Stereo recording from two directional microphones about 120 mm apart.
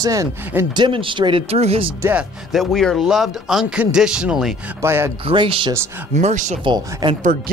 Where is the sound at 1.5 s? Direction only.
55° right (ahead or behind).